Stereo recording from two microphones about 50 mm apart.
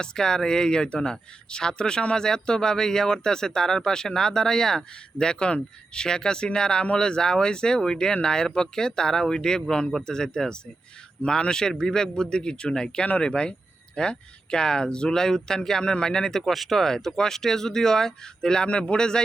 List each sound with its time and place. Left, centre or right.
0.0 s speech: centre
16.5 s speech: centre